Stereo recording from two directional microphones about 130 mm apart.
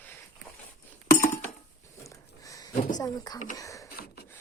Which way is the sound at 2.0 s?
25° left (ahead or behind).